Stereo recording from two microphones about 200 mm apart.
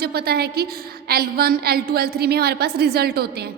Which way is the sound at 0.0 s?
55° right (ahead or behind).